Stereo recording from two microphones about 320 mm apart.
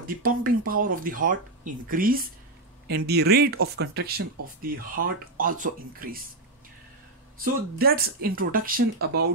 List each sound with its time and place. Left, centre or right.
0.0 s speech: right
7.3 s speech: right